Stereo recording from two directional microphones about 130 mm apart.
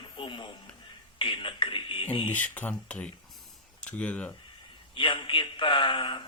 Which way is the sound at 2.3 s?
10° left (ahead or behind).